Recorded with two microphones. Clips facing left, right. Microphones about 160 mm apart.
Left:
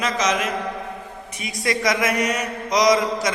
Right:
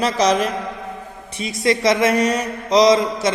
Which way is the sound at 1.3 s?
30° right (ahead or behind).